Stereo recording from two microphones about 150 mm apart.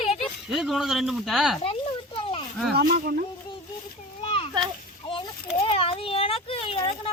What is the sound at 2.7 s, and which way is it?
Speech, 90° right.